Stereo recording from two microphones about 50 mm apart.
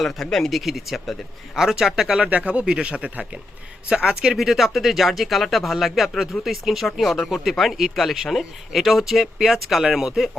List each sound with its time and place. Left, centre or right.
0.0 s speech: centre
2.3 s speech: right
3.8 s speech: centre
4.4 s speech: centre